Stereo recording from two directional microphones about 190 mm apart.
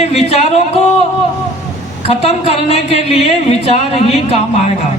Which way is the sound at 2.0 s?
30° left (ahead or behind).